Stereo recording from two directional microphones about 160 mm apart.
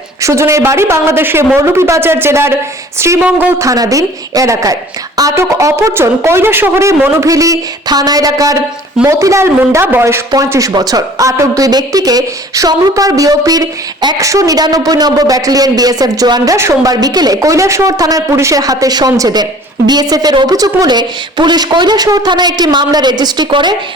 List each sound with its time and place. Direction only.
0.2 s a woman's voice: 20° right (ahead or behind)